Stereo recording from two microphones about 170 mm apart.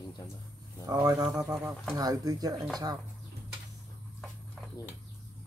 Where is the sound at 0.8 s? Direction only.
20° right (ahead or behind).